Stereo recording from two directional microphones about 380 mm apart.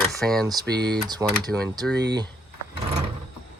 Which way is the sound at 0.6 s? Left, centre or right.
Right.